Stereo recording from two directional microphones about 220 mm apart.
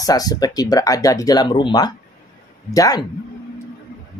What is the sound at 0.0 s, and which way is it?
A woman's voice, 15° left (ahead or behind).